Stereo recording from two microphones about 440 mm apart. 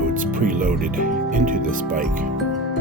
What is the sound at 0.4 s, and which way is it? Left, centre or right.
Speech, centre.